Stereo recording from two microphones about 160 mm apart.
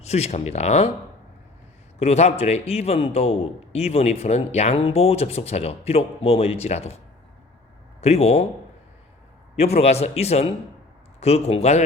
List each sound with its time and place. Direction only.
0.0 s speech: 40° left (ahead or behind)
2.0 s a man's voice: 45° left (ahead or behind)
8.0 s a man's voice: 40° left (ahead or behind)
9.6 s a man's voice: 40° left (ahead or behind)